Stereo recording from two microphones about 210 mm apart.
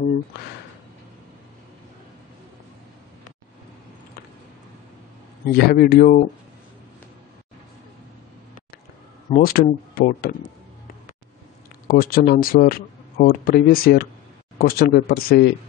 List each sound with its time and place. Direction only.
5.5 s speech: 45° left (ahead or behind)
9.4 s speech: 45° left (ahead or behind)
11.9 s speech: 45° left (ahead or behind)